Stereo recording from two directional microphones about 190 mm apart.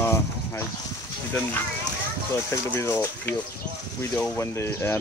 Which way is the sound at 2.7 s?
10° left (ahead or behind).